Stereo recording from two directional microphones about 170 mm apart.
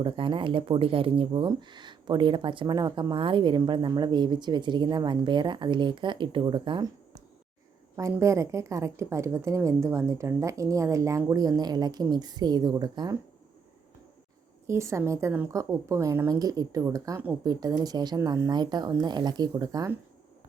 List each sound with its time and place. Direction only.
0.0 s a woman's voice: 30° right (ahead or behind)
14.7 s a woman's voice: 15° right (ahead or behind)